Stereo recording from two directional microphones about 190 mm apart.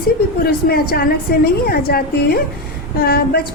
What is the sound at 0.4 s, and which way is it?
A woman's voice, 55° left (ahead or behind).